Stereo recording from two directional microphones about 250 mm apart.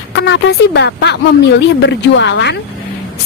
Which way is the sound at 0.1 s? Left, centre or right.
Left.